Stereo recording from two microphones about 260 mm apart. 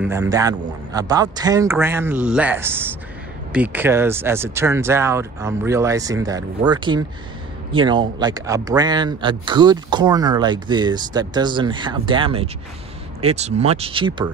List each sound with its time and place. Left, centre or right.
0.0 s speech: centre